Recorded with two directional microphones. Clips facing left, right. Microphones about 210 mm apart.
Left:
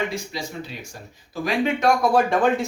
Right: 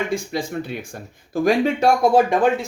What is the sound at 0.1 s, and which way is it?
Speech, 55° right (ahead or behind).